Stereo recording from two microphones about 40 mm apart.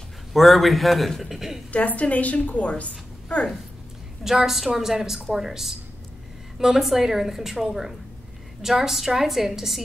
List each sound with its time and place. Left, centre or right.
0.3 s a man's voice: centre
1.7 s a woman's voice: left
4.2 s a woman's voice: centre